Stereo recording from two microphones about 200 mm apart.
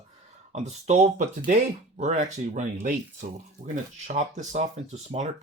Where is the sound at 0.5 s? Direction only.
35° right (ahead or behind).